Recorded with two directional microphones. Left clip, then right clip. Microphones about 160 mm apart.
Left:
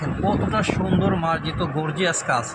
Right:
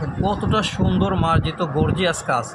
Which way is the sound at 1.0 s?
35° right (ahead or behind).